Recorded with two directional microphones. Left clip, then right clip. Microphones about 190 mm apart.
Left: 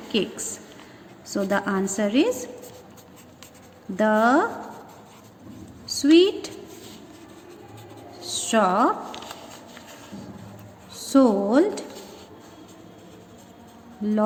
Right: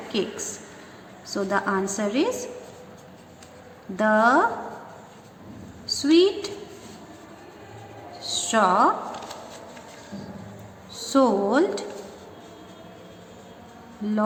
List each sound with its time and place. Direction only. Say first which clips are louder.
0.1 s a woman's voice: left 2 dB; 45° left (ahead or behind)
3.9 s a woman's voice: right 1 dB; 45° left (ahead or behind)
5.8 s a woman's voice: left 2 dB; 45° left (ahead or behind)
8.2 s a sound: even; 45° left (ahead or behind)
10.9 s speech: left 1 dB; 45° left (ahead or behind)